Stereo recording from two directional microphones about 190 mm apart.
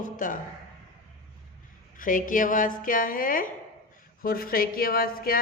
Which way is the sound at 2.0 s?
45° left (ahead or behind).